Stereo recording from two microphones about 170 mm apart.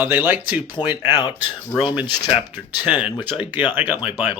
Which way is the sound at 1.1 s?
25° left (ahead or behind).